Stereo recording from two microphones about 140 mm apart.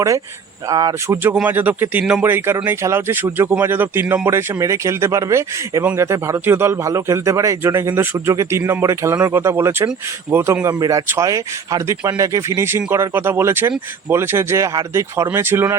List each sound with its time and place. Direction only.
0.7 s a man's voice: 25° right (ahead or behind)
1.3 s a man's voice: 10° right (ahead or behind)